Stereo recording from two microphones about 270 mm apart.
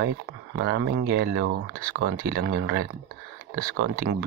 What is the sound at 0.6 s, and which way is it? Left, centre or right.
Speech, right.